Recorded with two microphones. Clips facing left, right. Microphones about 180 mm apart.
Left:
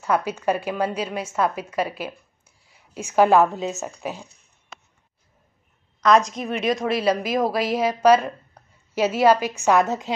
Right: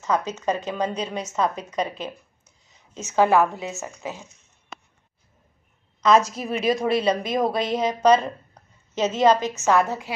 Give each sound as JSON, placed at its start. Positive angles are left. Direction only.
{"t": 0.0, "sound": "a woman's voice", "side_deg": 10}
{"t": 4.2, "sound": "speech", "side_deg": 35}
{"t": 5.9, "sound": "a woman's voice", "side_deg": 0}